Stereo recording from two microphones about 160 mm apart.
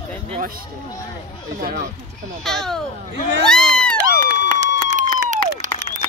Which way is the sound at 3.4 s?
5° left (ahead or behind).